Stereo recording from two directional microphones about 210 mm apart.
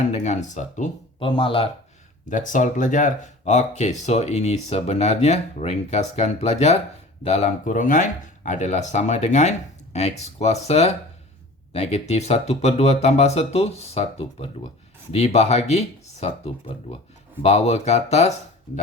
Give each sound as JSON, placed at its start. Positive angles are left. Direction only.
{"t": 0.0, "sound": "speech", "side_deg": 35}
{"t": 2.3, "sound": "speech", "side_deg": 40}